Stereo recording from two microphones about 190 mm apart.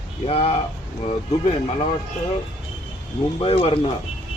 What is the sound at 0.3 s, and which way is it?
Speech, 30° left (ahead or behind).